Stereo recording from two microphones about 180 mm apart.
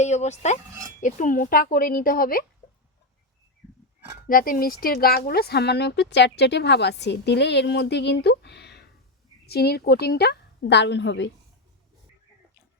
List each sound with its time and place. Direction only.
0.0 s speech: 40° left (ahead or behind)
4.3 s a woman's voice: 50° left (ahead or behind); by 11.3 s 80° left